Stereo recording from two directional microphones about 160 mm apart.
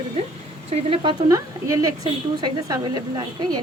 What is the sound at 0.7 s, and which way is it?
Speech, 40° right (ahead or behind).